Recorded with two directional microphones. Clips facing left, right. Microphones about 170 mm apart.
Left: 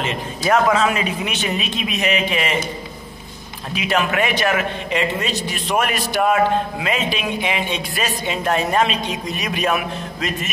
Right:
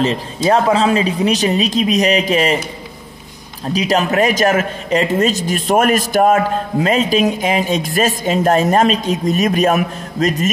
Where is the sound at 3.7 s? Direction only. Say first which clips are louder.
Right 5 dB; 40° right (ahead or behind).